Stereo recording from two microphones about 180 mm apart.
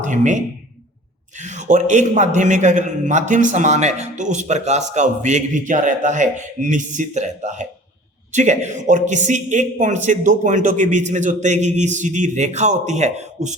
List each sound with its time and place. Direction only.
0.0 s a man's voice: 45° right (ahead or behind)